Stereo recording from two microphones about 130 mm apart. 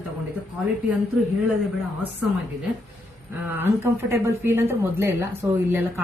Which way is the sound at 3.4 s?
15° right (ahead or behind).